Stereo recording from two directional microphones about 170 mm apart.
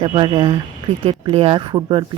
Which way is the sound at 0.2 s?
30° right (ahead or behind).